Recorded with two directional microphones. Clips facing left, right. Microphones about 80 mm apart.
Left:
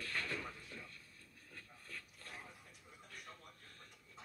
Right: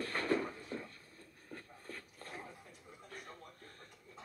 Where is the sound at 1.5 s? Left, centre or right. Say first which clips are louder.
Right 5 dB; right.